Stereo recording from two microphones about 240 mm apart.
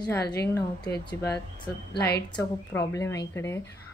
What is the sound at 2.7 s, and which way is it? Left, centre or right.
Speech, centre.